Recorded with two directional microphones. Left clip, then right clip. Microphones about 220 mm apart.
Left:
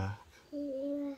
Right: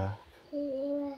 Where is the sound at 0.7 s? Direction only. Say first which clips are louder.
Right 3 dB; 40° left (ahead or behind).